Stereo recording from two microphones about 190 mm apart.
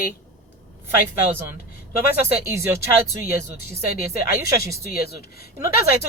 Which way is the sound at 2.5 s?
15° right (ahead or behind).